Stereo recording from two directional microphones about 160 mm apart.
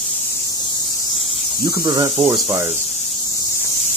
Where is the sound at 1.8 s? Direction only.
25° right (ahead or behind).